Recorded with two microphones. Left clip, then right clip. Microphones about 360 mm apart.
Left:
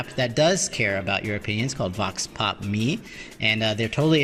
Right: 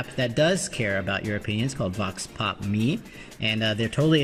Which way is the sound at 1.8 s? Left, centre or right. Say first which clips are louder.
Left 4 dB; left.